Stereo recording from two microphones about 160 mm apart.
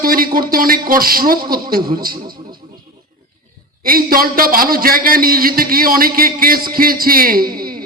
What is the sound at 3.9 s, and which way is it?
A man's voice, 65° right (ahead or behind).